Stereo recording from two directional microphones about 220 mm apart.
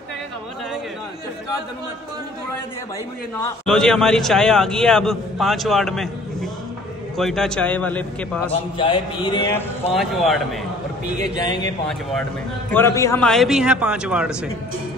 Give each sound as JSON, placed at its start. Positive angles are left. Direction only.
{"t": 3.3, "sound": "a man's voice", "side_deg": 5}
{"t": 7.2, "sound": "a man's voice", "side_deg": 0}
{"t": 8.5, "sound": "a man's voice", "side_deg": 25}
{"t": 9.9, "sound": "a man's voice", "side_deg": 0}
{"t": 11.3, "sound": "a man's voice", "side_deg": 20}
{"t": 12.7, "sound": "a man's voice", "side_deg": 10}